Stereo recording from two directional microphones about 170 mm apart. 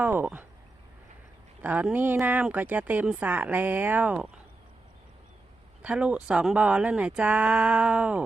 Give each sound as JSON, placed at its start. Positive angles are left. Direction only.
{"t": 0.0, "sound": "speech", "side_deg": -10}
{"t": 1.6, "sound": "speech", "side_deg": -10}
{"t": 5.8, "sound": "speech", "side_deg": -5}